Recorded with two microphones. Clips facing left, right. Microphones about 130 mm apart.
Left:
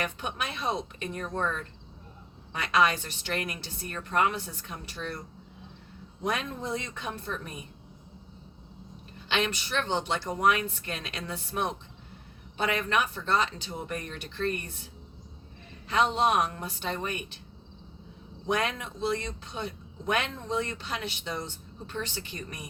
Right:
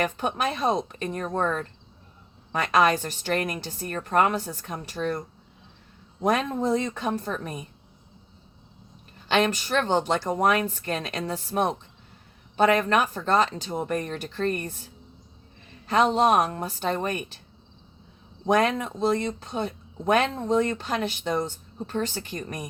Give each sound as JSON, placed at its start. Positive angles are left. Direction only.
{"t": 0.0, "sound": "speech", "side_deg": -40}
{"t": 6.2, "sound": "speech", "side_deg": -40}
{"t": 9.3, "sound": "speech", "side_deg": -45}
{"t": 15.9, "sound": "speech", "side_deg": -40}
{"t": 18.4, "sound": "speech", "side_deg": -40}